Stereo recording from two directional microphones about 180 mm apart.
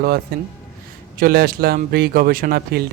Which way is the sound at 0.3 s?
60° right (ahead or behind).